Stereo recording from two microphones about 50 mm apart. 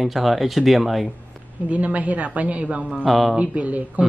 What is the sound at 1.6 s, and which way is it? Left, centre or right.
Speech, right.